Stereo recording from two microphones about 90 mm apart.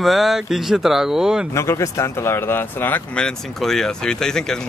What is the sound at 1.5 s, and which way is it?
Speech, 30° left (ahead or behind).